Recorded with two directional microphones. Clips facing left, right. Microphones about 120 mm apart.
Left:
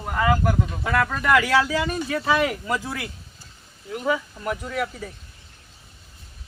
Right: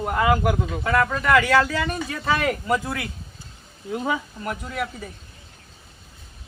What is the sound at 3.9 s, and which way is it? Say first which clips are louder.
Speech: left 1 dB; 25° right (ahead or behind).